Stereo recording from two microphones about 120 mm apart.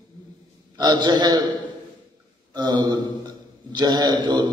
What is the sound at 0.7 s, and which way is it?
Speech, 40° right (ahead or behind).